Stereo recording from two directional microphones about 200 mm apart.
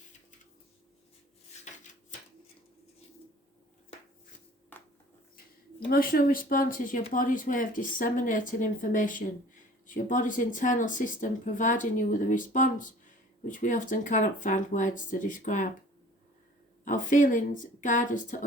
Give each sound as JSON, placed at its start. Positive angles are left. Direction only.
{"t": 4.7, "sound": "a sound", "side_deg": 10}
{"t": 5.9, "sound": "speech", "side_deg": 45}
{"t": 16.8, "sound": "speech", "side_deg": 40}